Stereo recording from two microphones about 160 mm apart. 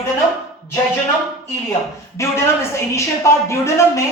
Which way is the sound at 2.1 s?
15° left (ahead or behind).